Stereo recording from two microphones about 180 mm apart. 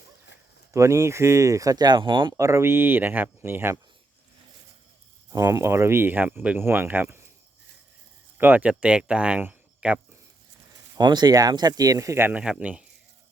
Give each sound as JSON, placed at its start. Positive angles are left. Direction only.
{"t": 0.7, "sound": "speech", "side_deg": -15}
{"t": 2.3, "sound": "speech", "side_deg": -15}
{"t": 5.3, "sound": "speech", "side_deg": -15}
{"t": 8.4, "sound": "speech", "side_deg": -10}
{"t": 10.9, "sound": "speech", "side_deg": -25}